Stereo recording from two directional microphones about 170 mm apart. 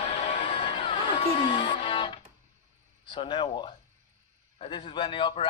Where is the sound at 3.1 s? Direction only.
30° left (ahead or behind).